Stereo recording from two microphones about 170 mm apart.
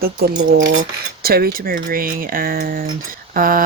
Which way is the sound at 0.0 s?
65° right (ahead or behind).